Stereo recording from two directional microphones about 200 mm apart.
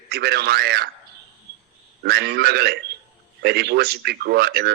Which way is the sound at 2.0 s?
55° right (ahead or behind).